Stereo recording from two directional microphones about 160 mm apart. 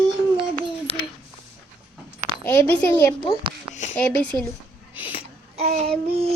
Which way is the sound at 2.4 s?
15° left (ahead or behind).